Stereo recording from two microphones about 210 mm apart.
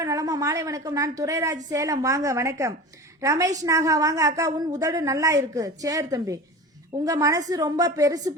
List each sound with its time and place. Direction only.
0.0 s a woman's voice: 15° right (ahead or behind)